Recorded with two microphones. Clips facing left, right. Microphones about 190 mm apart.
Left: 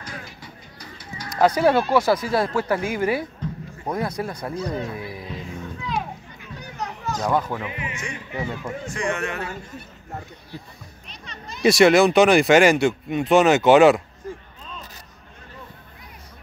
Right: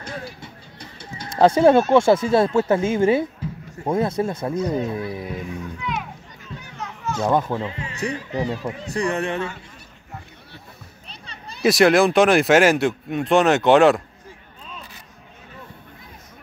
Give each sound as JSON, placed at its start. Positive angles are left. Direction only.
{"t": 0.4, "sound": "a sound", "side_deg": -25}
{"t": 2.7, "sound": "speech", "side_deg": -25}
{"t": 4.6, "sound": "speech", "side_deg": -15}
{"t": 5.8, "sound": "music", "side_deg": 30}
{"t": 6.6, "sound": "a sound", "side_deg": 40}
{"t": 7.2, "sound": "speech", "side_deg": -20}
{"t": 7.6, "sound": "speech", "side_deg": 15}
{"t": 7.9, "sound": "speech", "side_deg": -35}
{"t": 11.1, "sound": "a sound", "side_deg": -30}
{"t": 11.6, "sound": "speech", "side_deg": 0}